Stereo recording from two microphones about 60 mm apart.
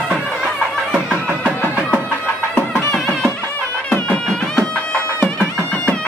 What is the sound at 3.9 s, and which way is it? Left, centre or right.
Music, centre.